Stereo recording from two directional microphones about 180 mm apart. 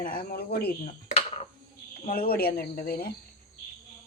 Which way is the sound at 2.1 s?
55° left (ahead or behind).